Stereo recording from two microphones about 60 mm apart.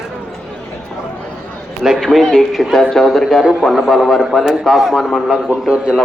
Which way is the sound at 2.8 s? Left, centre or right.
Centre.